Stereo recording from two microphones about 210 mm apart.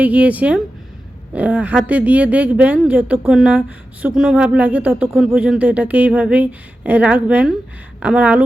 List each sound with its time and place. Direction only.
0.0 s speech: 5° right (ahead or behind)